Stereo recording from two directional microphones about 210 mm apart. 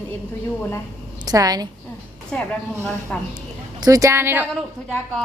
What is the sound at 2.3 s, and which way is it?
Speech, 5° left (ahead or behind).